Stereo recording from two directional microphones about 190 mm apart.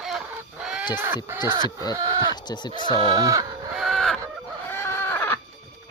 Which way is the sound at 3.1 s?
20° right (ahead or behind).